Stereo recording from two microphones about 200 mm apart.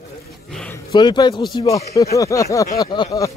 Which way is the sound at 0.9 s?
20° left (ahead or behind).